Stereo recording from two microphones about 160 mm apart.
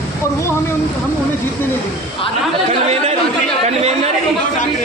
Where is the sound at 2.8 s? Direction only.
40° right (ahead or behind).